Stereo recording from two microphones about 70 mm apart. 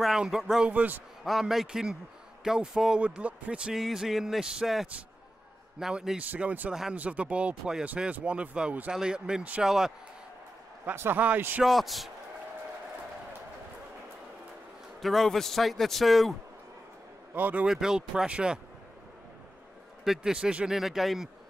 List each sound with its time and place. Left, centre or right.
0.0 s speech: centre
0.7 s speech: right
1.2 s a man's voice: centre
6.3 s speech: right
6.7 s speech: centre
7.0 s speech: centre
10.9 s speech: right
11.6 s a man's voice: centre
15.0 s a man's voice: centre
17.3 s a man's voice: right
17.6 s speech: centre
20.1 s a man's voice: centre